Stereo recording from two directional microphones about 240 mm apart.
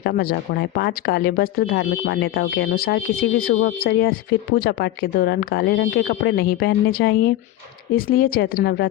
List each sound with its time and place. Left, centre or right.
0.0 s speech: left
3.8 s speech: left